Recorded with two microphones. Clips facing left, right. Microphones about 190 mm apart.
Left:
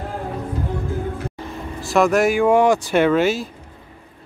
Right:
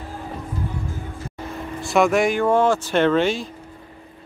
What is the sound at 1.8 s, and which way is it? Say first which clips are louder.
Speech: left 1 dB; centre (ahead or behind).